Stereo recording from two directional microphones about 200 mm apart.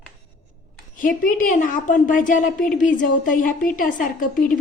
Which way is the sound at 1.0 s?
40° left (ahead or behind).